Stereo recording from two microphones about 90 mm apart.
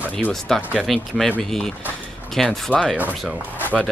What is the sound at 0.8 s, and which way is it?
Speech, centre (ahead or behind).